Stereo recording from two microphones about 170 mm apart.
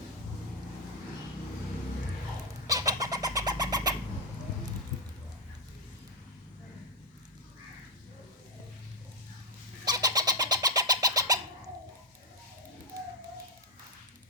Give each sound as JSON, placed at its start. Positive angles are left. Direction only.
{"t": 2.6, "sound": "bird", "side_deg": -20}
{"t": 9.8, "sound": "bird", "side_deg": -20}